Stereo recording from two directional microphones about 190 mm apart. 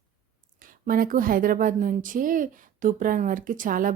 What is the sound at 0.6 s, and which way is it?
A woman's voice, 50° right (ahead or behind).